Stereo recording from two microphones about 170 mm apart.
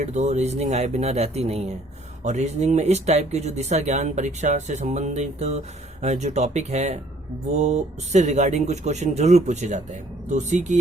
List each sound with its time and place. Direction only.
0.0 s speech: 45° right (ahead or behind)